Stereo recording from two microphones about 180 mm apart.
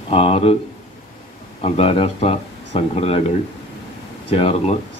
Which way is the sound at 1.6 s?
35° left (ahead or behind).